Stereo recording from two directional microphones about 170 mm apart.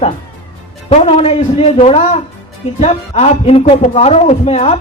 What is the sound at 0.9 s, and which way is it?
A woman's voice, 35° left (ahead or behind).